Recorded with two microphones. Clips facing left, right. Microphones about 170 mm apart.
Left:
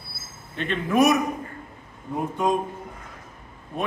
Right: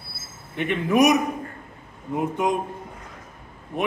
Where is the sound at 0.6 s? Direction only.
15° right (ahead or behind).